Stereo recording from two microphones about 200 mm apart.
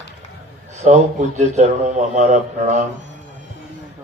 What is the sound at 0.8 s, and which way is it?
A man's voice, 35° right (ahead or behind).